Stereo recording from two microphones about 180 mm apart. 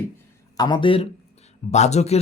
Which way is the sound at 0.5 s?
25° left (ahead or behind).